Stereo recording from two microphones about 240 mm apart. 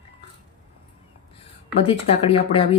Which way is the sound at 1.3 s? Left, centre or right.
Left.